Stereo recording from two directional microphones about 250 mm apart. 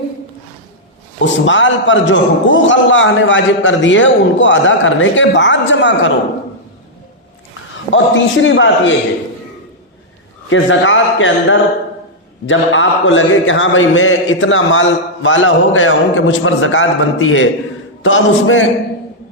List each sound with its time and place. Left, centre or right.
1.2 s speech: left
7.9 s speech: left
10.5 s speech: left